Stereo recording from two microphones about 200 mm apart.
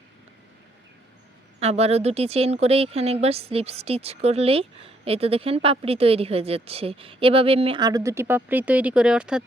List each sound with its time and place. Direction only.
1.5 s speech: 30° right (ahead or behind); by 9.4 s 5° right (ahead or behind)